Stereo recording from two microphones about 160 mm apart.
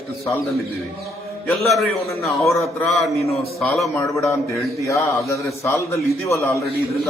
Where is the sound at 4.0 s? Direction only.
15° left (ahead or behind).